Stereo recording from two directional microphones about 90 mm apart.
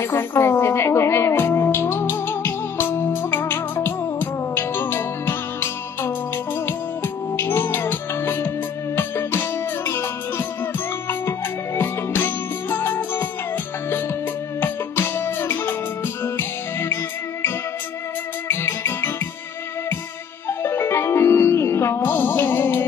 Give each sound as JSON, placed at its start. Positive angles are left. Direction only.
{"t": 0.0, "sound": "speech", "side_deg": 25}
{"t": 0.4, "sound": "music", "side_deg": 30}
{"t": 14.6, "sound": "music", "side_deg": 25}
{"t": 18.5, "sound": "music", "side_deg": 25}
{"t": 20.4, "sound": "music", "side_deg": 30}